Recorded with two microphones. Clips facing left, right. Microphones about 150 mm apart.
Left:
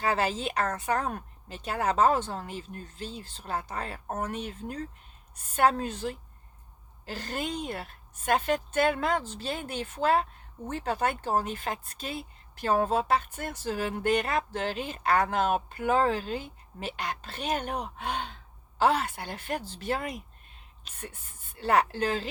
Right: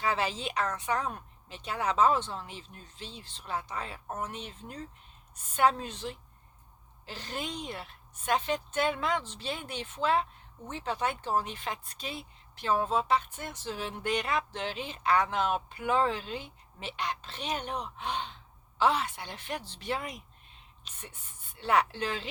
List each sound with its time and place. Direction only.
0.0 s a woman's voice: 40° left (ahead or behind)
3.1 s speech: 5° left (ahead or behind)
3.3 s speech: 45° left (ahead or behind)
9.2 s speech: 5° left (ahead or behind)
9.7 s speech: 50° left (ahead or behind)
19.6 s speech: 5° left (ahead or behind)
19.9 s speech: 50° left (ahead or behind)
21.6 s speech: 40° left (ahead or behind)